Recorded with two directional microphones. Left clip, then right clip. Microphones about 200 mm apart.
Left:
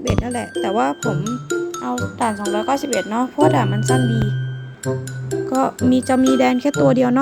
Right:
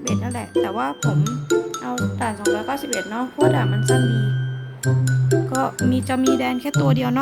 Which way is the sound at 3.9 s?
Centre (ahead or behind).